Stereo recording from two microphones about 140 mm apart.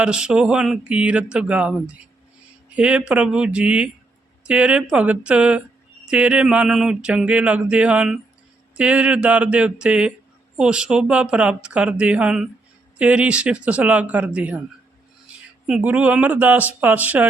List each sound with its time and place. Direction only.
0.0 s speech: 5° right (ahead or behind)
15.6 s speech: 10° right (ahead or behind)